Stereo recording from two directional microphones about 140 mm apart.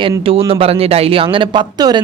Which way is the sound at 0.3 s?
40° right (ahead or behind).